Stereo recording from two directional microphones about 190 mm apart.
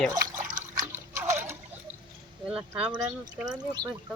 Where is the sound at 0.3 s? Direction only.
45° right (ahead or behind).